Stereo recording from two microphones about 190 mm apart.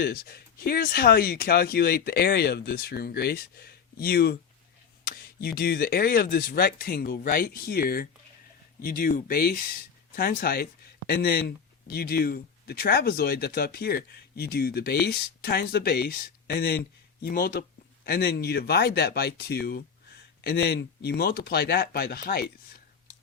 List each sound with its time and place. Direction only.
0.0 s speech: 55° left (ahead or behind)
5.0 s a sound: 55° left (ahead or behind)
5.5 s speech: 50° left (ahead or behind)